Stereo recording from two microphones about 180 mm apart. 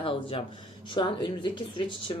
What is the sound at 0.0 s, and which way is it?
A woman's voice, 30° left (ahead or behind).